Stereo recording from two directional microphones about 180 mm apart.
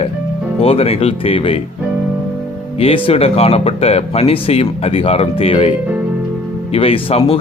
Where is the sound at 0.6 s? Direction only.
30° left (ahead or behind).